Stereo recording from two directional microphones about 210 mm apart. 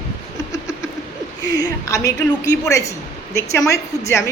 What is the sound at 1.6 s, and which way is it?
Speech, 15° left (ahead or behind).